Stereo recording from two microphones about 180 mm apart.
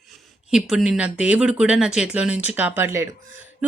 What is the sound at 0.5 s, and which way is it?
A woman's voice, centre (ahead or behind).